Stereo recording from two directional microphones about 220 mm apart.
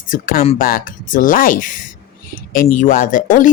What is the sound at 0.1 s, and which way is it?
Speech, 40° left (ahead or behind).